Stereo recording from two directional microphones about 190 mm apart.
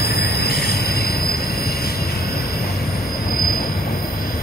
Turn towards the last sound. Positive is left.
turn(degrees=55)  # may be behind; listen again after turning